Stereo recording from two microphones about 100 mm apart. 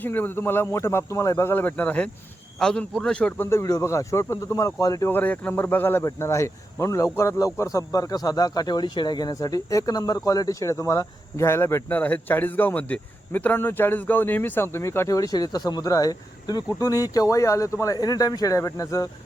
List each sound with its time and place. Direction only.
0.0 s a man's voice: 20° left (ahead or behind)
3.6 s speech: 30° left (ahead or behind)
5.0 s speech: 20° left (ahead or behind)